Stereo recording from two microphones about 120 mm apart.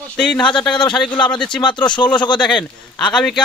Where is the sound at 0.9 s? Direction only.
5° left (ahead or behind).